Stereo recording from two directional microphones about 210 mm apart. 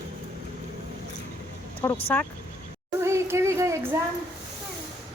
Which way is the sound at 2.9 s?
10° right (ahead or behind).